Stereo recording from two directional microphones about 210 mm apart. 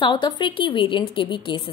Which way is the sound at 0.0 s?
25° left (ahead or behind).